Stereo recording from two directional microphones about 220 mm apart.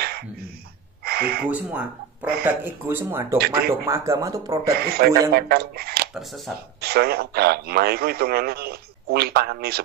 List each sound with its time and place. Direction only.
1.0 s gasp: 45° right (ahead or behind)
1.4 s speech: 5° right (ahead or behind)
3.3 s a man's voice: 45° right (ahead or behind)
3.8 s speech: 10° right (ahead or behind)
4.6 s a man's voice: 45° right (ahead or behind)
6.1 s speech: centre (ahead or behind)
6.8 s a man's voice: 45° right (ahead or behind)